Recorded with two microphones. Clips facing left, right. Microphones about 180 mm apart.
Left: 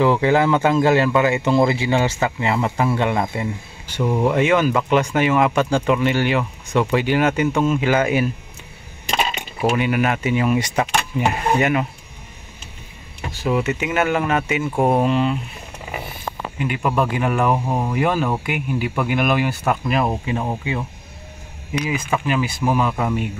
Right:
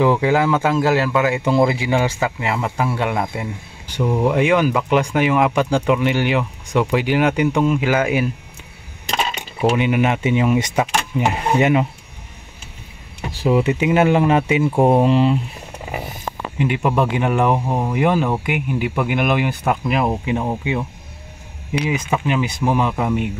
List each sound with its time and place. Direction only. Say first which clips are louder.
0.0 s speech: even; 10° right (ahead or behind)
4.0 s speech: right 1 dB; 5° left (ahead or behind)
4.3 s speech: right 1 dB; 15° right (ahead or behind)
9.6 s speech: right 2 dB; 20° right (ahead or behind)
13.3 s speech: right 4 dB; 30° right (ahead or behind)
16.5 s speech: right 2 dB; 25° right (ahead or behind)
21.7 s speech: right 2 dB; 30° right (ahead or behind)